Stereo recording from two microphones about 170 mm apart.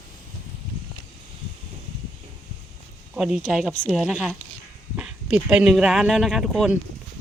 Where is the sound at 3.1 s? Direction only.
5° right (ahead or behind).